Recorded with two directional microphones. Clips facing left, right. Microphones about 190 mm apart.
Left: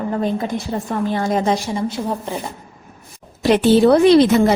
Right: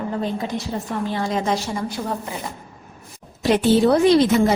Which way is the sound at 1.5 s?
25° left (ahead or behind).